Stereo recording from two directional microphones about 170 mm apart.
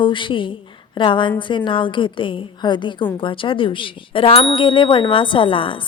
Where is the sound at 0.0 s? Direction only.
30° left (ahead or behind).